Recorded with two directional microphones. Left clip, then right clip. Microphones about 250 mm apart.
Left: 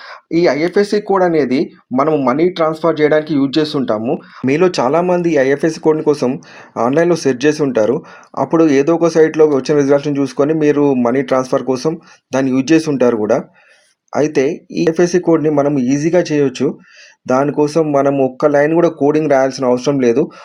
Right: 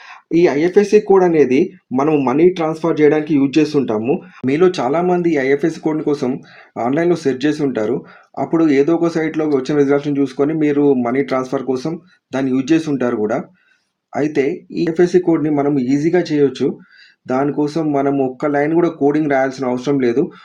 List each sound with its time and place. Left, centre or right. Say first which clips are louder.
0.3 s speech: even; left
3.2 s speech: even; left